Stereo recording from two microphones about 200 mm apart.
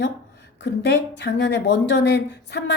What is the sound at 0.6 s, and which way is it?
A woman's voice, 60° left (ahead or behind).